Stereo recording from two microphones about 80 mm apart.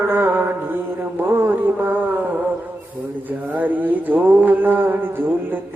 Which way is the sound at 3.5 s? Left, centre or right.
Right.